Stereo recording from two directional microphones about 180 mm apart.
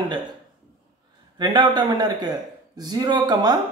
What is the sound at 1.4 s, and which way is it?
A man's voice, 25° right (ahead or behind).